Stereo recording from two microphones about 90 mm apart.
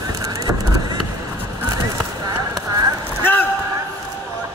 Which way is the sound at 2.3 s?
50° right (ahead or behind).